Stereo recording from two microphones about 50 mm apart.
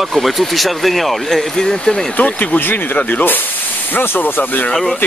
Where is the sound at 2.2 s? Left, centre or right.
Left.